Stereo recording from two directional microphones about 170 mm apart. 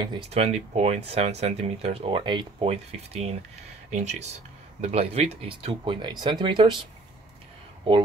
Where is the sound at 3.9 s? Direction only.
40° right (ahead or behind).